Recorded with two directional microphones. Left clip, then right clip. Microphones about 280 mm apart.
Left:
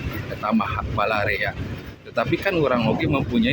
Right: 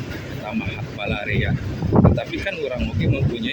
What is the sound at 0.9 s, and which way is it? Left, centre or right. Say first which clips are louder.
Speech: left 4 dB; left.